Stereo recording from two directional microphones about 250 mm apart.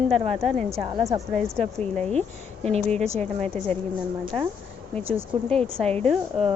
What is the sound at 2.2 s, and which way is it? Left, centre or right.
Speech, right.